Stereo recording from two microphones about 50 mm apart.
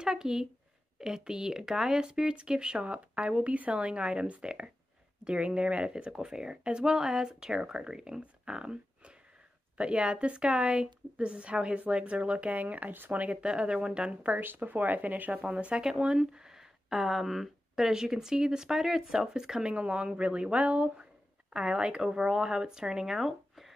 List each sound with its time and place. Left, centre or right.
0.0 s a woman's voice: centre; by 13.4 s right
13.4 s a woman's voice: centre
14.2 s speech: right
15.4 s a woman's voice: right
19.7 s a woman's voice: right; by 23.7 s centre